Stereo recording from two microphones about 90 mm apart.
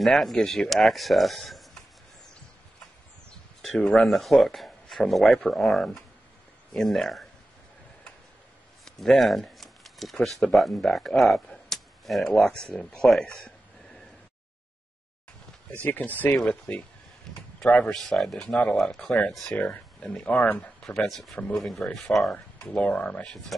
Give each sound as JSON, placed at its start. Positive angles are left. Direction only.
{"t": 0.0, "sound": "speech", "side_deg": 0}
{"t": 3.3, "sound": "speech", "side_deg": 5}
{"t": 8.8, "sound": "speech", "side_deg": 5}
{"t": 15.7, "sound": "speech", "side_deg": 20}